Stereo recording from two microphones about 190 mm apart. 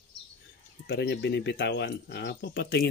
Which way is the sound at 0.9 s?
65° left (ahead or behind).